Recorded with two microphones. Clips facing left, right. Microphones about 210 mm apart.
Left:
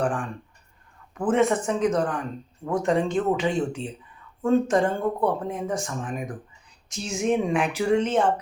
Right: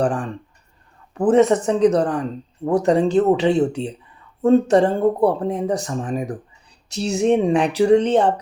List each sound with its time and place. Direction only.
0.0 s speech: 35° right (ahead or behind)